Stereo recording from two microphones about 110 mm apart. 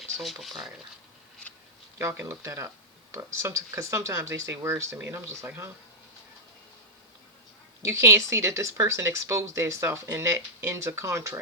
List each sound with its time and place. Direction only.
0.0 s speech: centre (ahead or behind)
1.4 s a sound: 10° left (ahead or behind)
2.0 s speech: 25° right (ahead or behind)
7.9 s speech: 25° right (ahead or behind)